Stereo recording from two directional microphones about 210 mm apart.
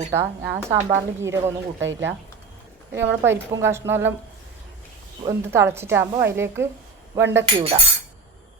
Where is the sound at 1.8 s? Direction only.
60° right (ahead or behind).